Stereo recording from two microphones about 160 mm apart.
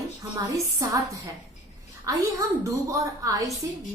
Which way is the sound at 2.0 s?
20° right (ahead or behind).